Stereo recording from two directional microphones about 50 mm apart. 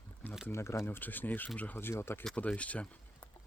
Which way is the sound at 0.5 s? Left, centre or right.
Left.